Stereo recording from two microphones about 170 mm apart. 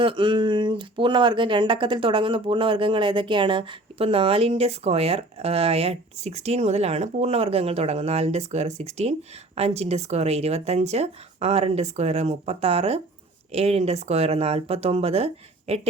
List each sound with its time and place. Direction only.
0.0 s speech: 30° right (ahead or behind)